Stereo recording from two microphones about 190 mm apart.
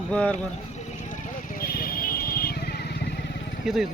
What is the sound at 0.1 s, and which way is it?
Speech, 5° left (ahead or behind).